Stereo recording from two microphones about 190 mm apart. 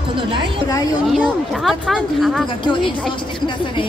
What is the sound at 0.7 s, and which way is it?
Speech, 20° left (ahead or behind).